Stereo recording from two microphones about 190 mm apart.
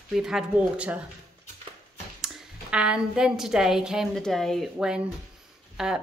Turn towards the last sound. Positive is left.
turn(degrees=-5)  # may be behind; listen again after turning